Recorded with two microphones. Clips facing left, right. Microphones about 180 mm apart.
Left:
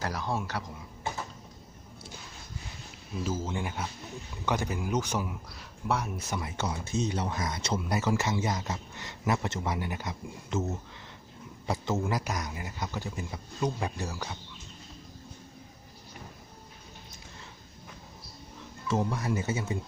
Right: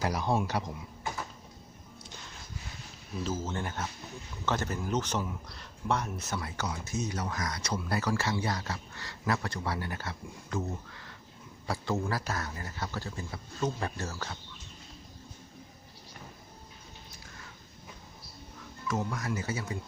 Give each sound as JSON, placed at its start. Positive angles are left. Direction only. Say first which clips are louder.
{"t": 0.0, "sound": "speech", "louder": "right 3 dB", "side_deg": -15}
{"t": 3.2, "sound": "a man's voice", "louder": "left 1 dB", "side_deg": 10}
{"t": 18.9, "sound": "speech", "louder": "left 4 dB", "side_deg": 25}